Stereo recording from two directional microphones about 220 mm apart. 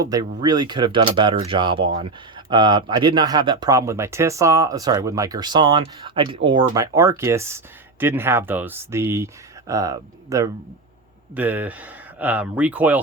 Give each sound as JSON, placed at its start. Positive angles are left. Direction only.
{"t": 0.0, "sound": "speech", "side_deg": -15}